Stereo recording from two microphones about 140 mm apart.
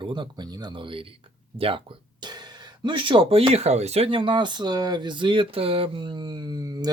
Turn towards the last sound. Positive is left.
turn(degrees=-25)  # may be behind; listen again after turning